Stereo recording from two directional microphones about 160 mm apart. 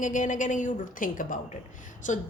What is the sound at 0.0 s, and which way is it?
A woman's voice, 55° left (ahead or behind).